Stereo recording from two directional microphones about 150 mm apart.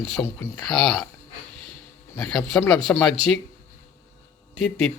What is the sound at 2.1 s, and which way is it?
Speech, 5° left (ahead or behind).